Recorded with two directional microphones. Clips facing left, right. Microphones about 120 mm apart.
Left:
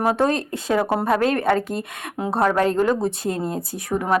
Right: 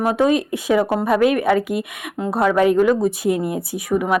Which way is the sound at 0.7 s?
20° left (ahead or behind).